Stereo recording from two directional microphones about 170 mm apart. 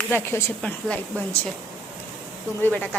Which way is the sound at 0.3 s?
15° left (ahead or behind).